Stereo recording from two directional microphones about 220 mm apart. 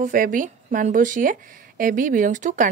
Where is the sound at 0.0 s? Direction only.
35° right (ahead or behind).